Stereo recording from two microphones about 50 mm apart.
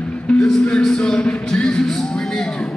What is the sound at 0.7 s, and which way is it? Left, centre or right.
Music, centre.